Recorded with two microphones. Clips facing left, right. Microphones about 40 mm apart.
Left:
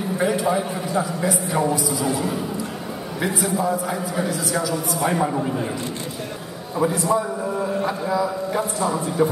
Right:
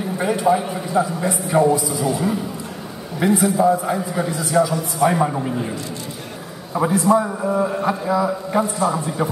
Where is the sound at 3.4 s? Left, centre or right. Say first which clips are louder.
Right 5 dB; centre.